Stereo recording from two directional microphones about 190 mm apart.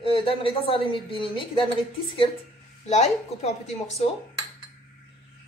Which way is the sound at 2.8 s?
35° left (ahead or behind).